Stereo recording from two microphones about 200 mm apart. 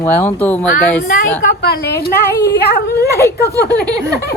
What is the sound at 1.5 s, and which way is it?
A woman's voice, 55° left (ahead or behind).